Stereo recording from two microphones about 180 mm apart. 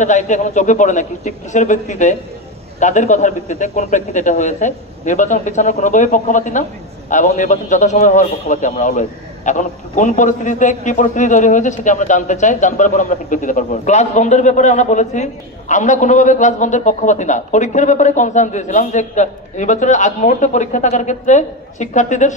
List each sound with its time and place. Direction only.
0.0 s a man's voice: 45° left (ahead or behind)